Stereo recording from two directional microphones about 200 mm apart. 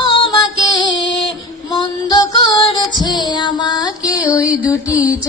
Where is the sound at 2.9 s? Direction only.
20° left (ahead or behind).